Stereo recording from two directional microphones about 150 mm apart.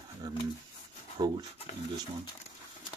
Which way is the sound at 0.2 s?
25° right (ahead or behind).